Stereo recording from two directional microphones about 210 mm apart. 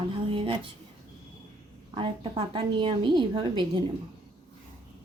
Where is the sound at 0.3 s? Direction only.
25° right (ahead or behind).